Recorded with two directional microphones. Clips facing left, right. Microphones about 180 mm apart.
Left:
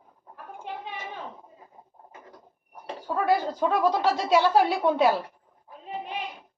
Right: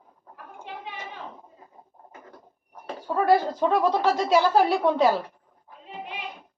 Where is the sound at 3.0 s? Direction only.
Centre (ahead or behind).